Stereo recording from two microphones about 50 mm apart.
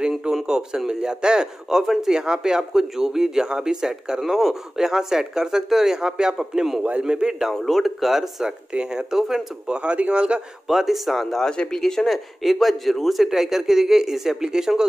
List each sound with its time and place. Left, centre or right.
0.2 s a man's voice: centre
6.8 s a man's voice: right
7.5 s a man's voice: centre; by 10.4 s right
10.7 s speech: centre
11.2 s a man's voice: centre